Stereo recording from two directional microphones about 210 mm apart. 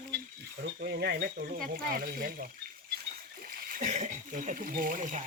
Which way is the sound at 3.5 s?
45° right (ahead or behind).